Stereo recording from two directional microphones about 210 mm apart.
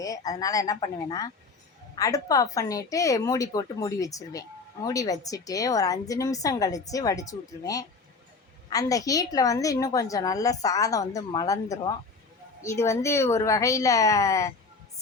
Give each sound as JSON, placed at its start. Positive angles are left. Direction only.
{"t": 0.3, "sound": "speech", "side_deg": 15}